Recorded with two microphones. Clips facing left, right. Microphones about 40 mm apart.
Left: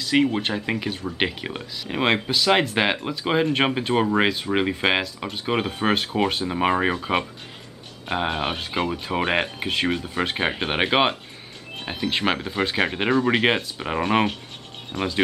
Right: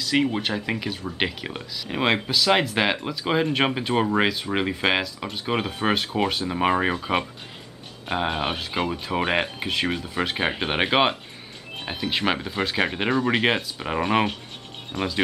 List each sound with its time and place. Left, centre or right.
0.0 s speech: centre